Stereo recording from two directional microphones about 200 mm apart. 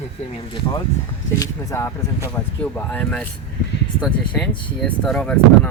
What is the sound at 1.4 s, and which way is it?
Speech, 15° left (ahead or behind).